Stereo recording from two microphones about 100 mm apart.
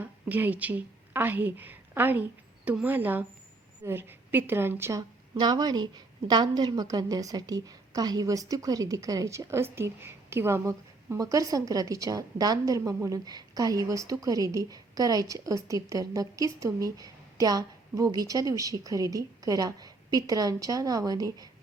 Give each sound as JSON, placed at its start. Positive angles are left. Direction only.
{"t": 0.0, "sound": "a woman's voice", "side_deg": -20}